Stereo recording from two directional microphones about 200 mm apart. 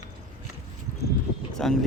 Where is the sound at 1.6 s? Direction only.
Centre (ahead or behind).